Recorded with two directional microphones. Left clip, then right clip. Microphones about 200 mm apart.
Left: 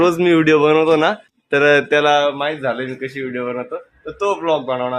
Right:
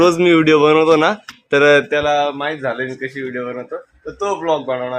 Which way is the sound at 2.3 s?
5° left (ahead or behind).